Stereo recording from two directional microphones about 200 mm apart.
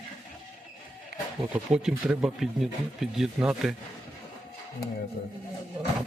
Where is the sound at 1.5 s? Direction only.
5° right (ahead or behind).